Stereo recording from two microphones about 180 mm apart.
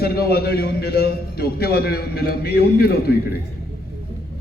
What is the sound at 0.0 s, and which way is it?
A man's voice, 60° left (ahead or behind).